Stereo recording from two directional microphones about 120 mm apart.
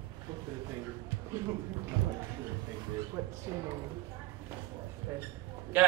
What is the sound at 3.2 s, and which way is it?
Speech, 25° right (ahead or behind).